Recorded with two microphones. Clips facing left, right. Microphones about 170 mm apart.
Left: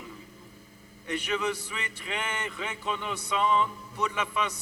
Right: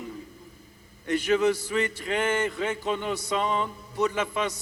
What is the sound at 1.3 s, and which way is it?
A man's voice, 45° right (ahead or behind).